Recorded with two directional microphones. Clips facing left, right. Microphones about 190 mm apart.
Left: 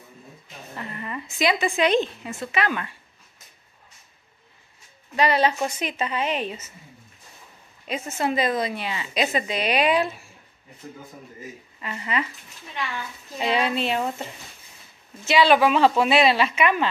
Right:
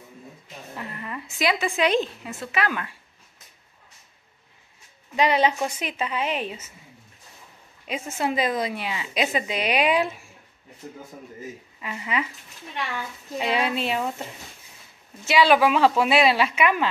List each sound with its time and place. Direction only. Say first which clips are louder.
0.7 s a woman's voice: left 2 dB; centre (ahead or behind)
5.1 s a woman's voice: even; 15° right (ahead or behind)
8.2 s a woman's voice: left 1 dB; 10° right (ahead or behind)
11.8 s a woman's voice: even; 5° right (ahead or behind)
13.4 s a woman's voice: left 1 dB; 5° right (ahead or behind)
15.2 s a woman's voice: left 1 dB; 10° right (ahead or behind)